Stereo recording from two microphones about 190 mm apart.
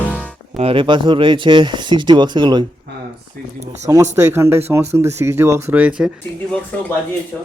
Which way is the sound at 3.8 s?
15° right (ahead or behind).